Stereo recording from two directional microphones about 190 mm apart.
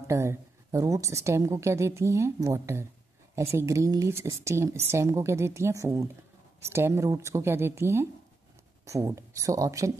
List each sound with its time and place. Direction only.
0.0 s a woman's voice: 15° right (ahead or behind)